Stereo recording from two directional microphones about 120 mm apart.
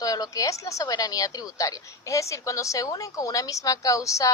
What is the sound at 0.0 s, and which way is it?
A woman's voice, 30° left (ahead or behind).